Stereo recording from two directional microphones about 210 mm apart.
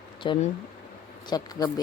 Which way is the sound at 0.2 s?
25° left (ahead or behind).